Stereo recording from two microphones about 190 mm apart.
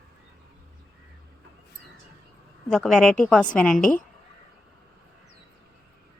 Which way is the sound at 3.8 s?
45° left (ahead or behind).